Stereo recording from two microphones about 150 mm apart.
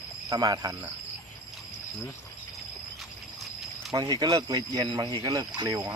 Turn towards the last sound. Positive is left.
turn(degrees=-25)  # may be behind; listen again after turning